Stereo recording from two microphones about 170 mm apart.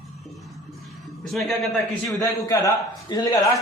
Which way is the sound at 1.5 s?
Centre (ahead or behind).